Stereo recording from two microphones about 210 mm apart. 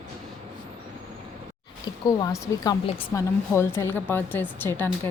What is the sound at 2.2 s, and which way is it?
A woman's voice, 15° left (ahead or behind).